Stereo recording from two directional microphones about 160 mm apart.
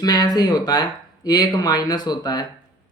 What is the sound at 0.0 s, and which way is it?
Speech, 25° left (ahead or behind).